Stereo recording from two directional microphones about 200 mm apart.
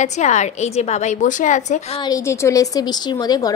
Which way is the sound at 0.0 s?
35° left (ahead or behind).